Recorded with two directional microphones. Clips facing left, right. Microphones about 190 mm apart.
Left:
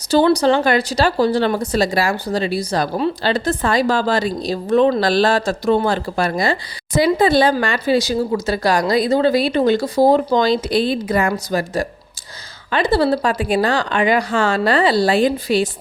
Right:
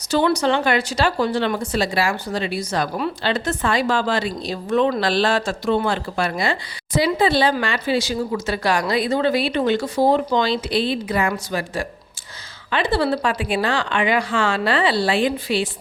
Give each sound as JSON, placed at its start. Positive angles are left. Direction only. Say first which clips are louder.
{"t": 0.1, "sound": "speech", "louder": "left 5 dB", "side_deg": 35}